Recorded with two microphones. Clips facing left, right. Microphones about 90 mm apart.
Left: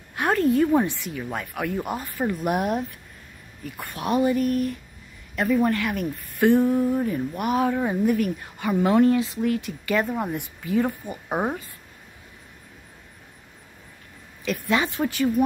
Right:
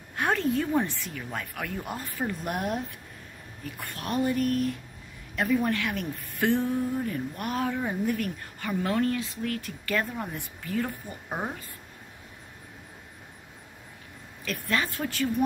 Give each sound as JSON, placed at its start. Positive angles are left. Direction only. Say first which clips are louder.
{"t": 0.1, "sound": "a sound", "louder": "left 5 dB", "side_deg": 5}
{"t": 0.6, "sound": "speech", "louder": "left 6 dB", "side_deg": 15}
{"t": 3.9, "sound": "speech", "louder": "left 6 dB", "side_deg": 15}
{"t": 6.4, "sound": "speech", "louder": "left 7 dB", "side_deg": 15}
{"t": 11.2, "sound": "a woman's voice", "louder": "left 7 dB", "side_deg": 40}
{"t": 14.4, "sound": "speech", "louder": "left 5 dB", "side_deg": 15}